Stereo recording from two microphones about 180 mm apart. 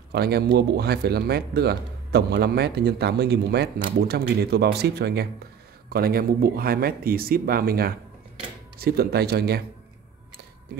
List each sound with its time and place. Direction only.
0.1 s speech: 65° right (ahead or behind)